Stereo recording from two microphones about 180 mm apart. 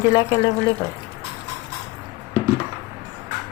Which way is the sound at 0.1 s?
20° left (ahead or behind).